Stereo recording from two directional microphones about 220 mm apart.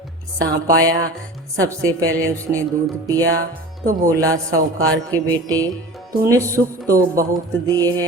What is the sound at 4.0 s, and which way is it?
A man's voice, 15° right (ahead or behind).